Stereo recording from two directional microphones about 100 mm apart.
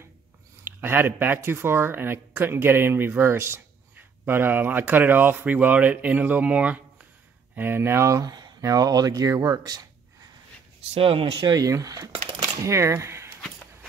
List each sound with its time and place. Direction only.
0.7 s speech: 20° right (ahead or behind); by 10.3 s 40° right (ahead or behind)
11.0 s speech: 70° right (ahead or behind)
11.4 s speech: 35° right (ahead or behind)